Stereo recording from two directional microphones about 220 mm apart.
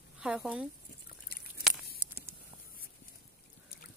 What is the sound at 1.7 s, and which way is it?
Walk, centre (ahead or behind).